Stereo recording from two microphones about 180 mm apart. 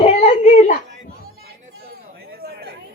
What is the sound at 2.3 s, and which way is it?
Chatter, 60° right (ahead or behind).